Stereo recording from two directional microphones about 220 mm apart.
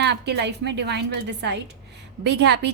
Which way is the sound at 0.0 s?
50° right (ahead or behind).